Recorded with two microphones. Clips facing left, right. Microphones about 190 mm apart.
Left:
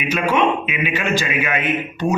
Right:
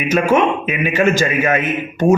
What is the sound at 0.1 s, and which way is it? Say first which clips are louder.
A man's voice: right 4 dB; 45° right (ahead or behind).